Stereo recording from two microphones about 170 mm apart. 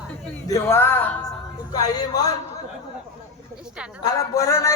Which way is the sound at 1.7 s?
25° left (ahead or behind).